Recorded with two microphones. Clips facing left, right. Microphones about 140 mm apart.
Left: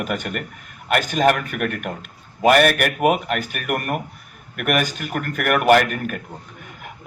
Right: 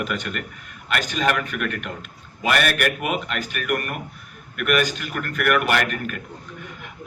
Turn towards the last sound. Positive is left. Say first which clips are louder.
# left 7 dB
turn(degrees=45)  # may be behind; listen again after turning